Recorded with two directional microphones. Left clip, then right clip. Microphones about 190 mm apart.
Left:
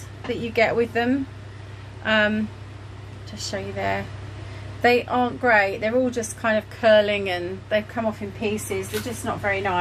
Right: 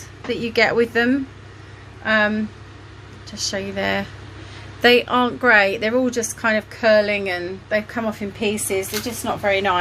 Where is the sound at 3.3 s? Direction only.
25° right (ahead or behind).